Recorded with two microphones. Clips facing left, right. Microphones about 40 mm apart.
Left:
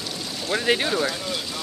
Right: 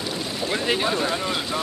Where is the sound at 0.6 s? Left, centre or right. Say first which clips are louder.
Left 2 dB; centre.